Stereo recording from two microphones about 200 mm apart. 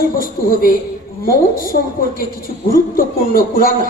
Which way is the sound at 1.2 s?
45° left (ahead or behind).